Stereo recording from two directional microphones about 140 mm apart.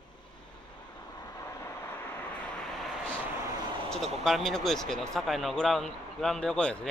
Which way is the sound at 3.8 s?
Centre (ahead or behind).